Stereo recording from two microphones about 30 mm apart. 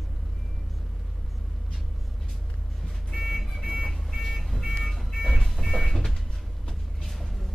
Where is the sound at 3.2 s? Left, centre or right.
Centre.